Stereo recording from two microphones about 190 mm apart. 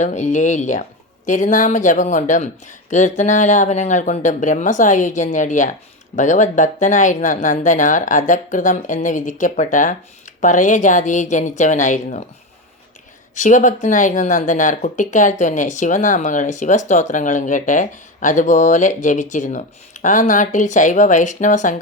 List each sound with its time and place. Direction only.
0.0 s speech: 40° left (ahead or behind)
13.3 s speech: 40° left (ahead or behind)